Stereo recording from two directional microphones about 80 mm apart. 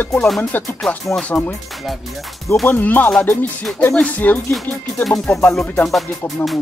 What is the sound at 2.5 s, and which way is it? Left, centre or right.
Speech, left.